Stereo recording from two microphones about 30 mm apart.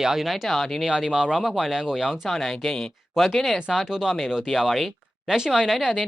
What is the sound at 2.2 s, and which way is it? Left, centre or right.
Speech, centre.